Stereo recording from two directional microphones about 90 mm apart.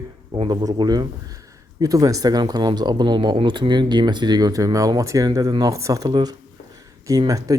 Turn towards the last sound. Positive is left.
turn(degrees=-40)  # may be behind; listen again after turning